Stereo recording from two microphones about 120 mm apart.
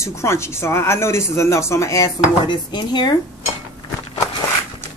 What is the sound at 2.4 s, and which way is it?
Dishes, 40° left (ahead or behind).